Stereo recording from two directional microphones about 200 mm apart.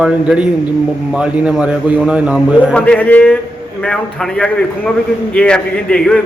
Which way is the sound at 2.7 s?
5° left (ahead or behind).